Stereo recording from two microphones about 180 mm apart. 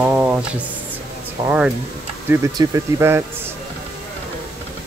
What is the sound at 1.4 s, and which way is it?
Speech, 15° right (ahead or behind).